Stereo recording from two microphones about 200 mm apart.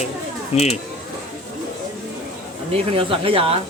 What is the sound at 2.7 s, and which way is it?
Speech, 25° right (ahead or behind).